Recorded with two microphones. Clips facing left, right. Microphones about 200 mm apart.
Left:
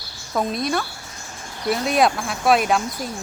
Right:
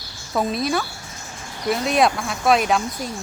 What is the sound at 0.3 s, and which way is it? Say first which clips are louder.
Speech: right 1 dB; centre (ahead or behind).